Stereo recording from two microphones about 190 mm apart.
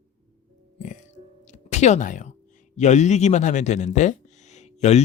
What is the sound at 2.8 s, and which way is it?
Speech, 40° left (ahead or behind).